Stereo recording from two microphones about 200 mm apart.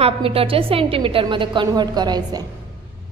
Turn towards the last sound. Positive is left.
turn(degrees=-20)  # may be behind; listen again after turning